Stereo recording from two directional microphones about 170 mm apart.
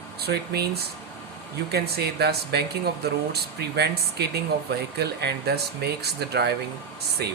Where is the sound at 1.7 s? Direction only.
70° right (ahead or behind).